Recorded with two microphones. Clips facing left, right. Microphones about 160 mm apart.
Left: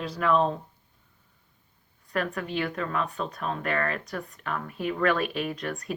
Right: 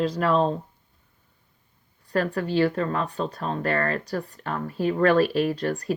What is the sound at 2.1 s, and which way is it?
Speech, 35° right (ahead or behind).